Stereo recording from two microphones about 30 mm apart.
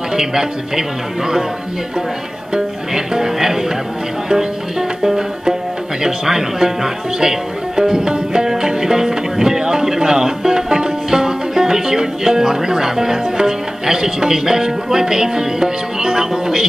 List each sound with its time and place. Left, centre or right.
0.1 s speech: right
2.5 s speech: right
4.3 s music: right
6.0 s speech: centre
8.5 s music: right